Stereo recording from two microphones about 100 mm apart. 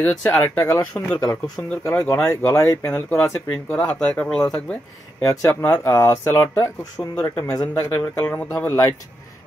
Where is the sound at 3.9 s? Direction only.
5° left (ahead or behind).